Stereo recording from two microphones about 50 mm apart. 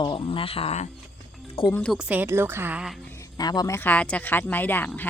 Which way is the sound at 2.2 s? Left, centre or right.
Right.